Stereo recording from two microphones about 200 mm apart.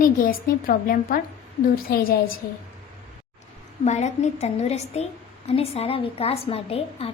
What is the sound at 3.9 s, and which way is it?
A woman's voice, 35° left (ahead or behind).